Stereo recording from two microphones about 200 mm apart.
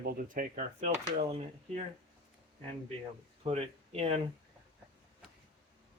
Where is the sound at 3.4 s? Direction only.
30° right (ahead or behind).